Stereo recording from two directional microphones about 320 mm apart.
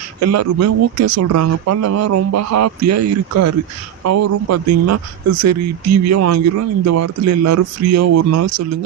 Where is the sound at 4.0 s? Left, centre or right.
Right.